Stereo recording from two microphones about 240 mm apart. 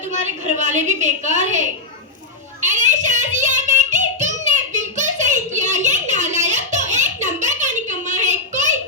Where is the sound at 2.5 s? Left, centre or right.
Right.